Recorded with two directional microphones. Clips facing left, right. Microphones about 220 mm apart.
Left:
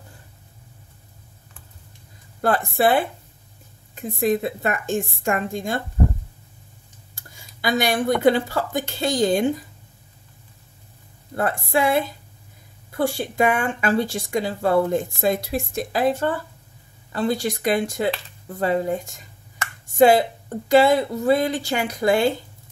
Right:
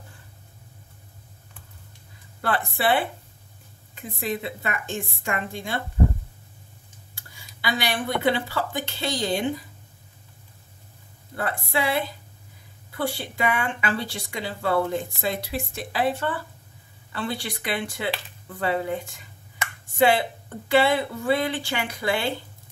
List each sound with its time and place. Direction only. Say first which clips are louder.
2.4 s speech: left 5 dB; 45° left (ahead or behind)
7.2 s speech: left 4 dB; 45° left (ahead or behind)
11.3 s speech: left 5 dB; 45° left (ahead or behind)